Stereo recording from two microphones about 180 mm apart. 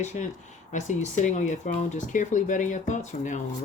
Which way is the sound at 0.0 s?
40° left (ahead or behind).